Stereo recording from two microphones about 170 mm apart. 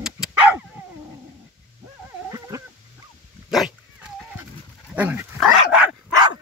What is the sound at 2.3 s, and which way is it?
Dog, 20° right (ahead or behind).